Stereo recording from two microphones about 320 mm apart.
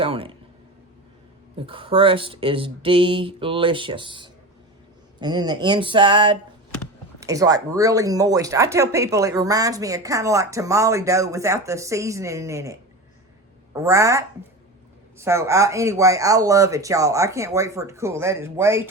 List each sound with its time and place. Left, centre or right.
0.0 s speech: centre
1.5 s speech: centre